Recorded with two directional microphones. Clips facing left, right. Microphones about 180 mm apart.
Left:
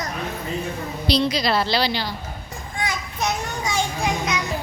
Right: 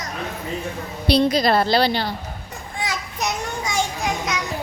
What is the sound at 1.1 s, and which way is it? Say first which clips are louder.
A woman's voice: right 4 dB; 50° right (ahead or behind).